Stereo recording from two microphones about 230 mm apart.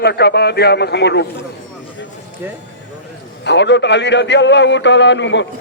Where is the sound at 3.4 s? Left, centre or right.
Left.